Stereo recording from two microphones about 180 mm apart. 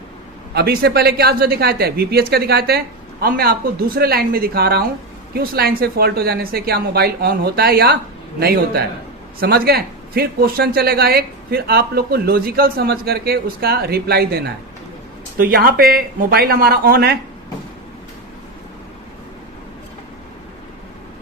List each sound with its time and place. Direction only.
0.5 s speech: 60° right (ahead or behind)